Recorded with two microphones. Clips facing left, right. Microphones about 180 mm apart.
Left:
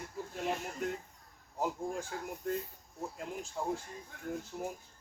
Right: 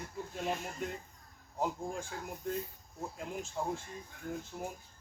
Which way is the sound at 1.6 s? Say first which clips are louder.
Left 1 dB; 5° left (ahead or behind).